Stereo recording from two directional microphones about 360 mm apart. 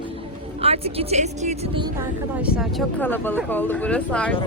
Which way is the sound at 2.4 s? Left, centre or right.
Centre.